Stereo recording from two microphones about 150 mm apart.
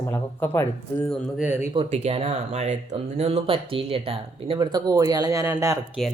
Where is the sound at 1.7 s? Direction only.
40° right (ahead or behind); by 6.0 s 20° right (ahead or behind).